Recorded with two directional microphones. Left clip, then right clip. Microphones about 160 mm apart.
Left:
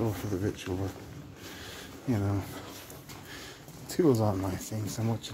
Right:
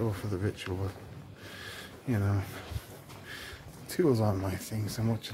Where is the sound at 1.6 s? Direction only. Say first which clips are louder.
Right 2 dB; 5° right (ahead or behind).